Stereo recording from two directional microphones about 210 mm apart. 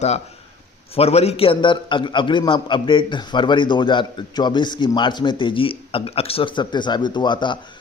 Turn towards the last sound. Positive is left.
turn(degrees=20)  # may be behind; listen again after turning